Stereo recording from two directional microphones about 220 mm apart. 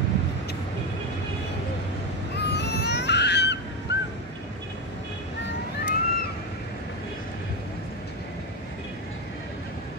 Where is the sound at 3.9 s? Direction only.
50° left (ahead or behind).